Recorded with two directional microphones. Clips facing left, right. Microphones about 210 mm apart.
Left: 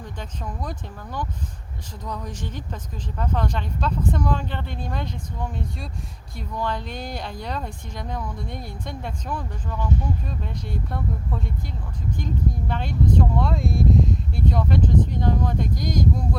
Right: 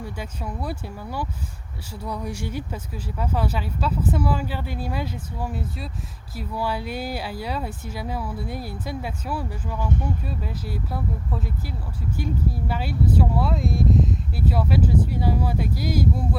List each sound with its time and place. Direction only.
0.0 s speech: 10° right (ahead or behind)